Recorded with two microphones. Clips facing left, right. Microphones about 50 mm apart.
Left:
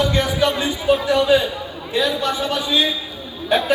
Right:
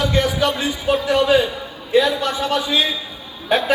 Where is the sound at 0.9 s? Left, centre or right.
Right.